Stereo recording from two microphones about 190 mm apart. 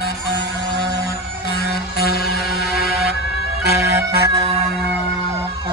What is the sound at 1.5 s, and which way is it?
Music, 55° left (ahead or behind).